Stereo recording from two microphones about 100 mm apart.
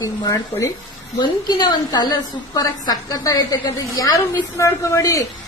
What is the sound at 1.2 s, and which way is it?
A woman's voice, 45° left (ahead or behind).